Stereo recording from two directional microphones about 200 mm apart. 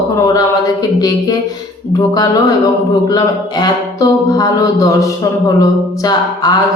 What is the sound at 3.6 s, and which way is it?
Music, 15° left (ahead or behind).